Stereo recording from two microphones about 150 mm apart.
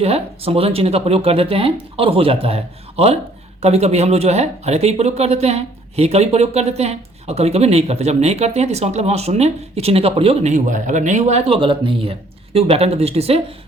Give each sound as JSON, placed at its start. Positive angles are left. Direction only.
{"t": 0.0, "sound": "speech", "side_deg": -40}
{"t": 10.5, "sound": "speech", "side_deg": -55}